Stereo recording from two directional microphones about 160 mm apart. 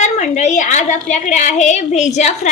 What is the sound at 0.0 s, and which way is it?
A woman's voice, 45° left (ahead or behind).